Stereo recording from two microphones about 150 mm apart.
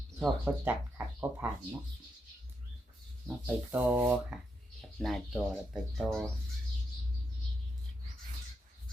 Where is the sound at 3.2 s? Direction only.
10° right (ahead or behind).